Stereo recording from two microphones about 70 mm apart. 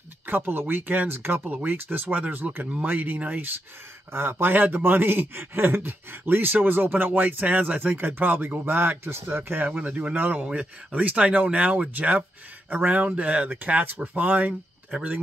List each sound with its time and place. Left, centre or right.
0.3 s speech: right
14.9 s speech: centre